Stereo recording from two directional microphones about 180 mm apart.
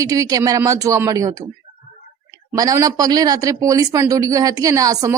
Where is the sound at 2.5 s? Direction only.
15° right (ahead or behind).